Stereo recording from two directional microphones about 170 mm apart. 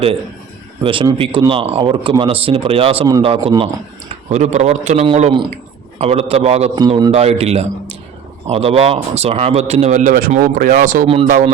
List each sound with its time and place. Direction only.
0.8 s a man's voice: 30° right (ahead or behind)
4.3 s speech: 40° right (ahead or behind)
6.7 s a man's voice: 25° right (ahead or behind)
7.1 s speech: 40° right (ahead or behind)